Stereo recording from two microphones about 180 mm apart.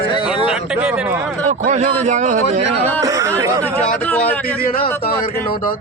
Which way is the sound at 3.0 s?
15° right (ahead or behind).